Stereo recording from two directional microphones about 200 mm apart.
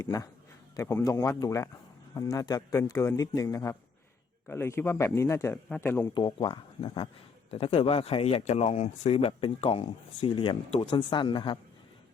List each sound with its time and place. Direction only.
0.0 s speech: 15° left (ahead or behind)
6.1 s speech: 20° left (ahead or behind)